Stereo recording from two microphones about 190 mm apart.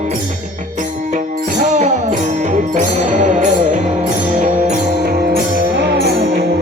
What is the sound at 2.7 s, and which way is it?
Music, 40° right (ahead or behind).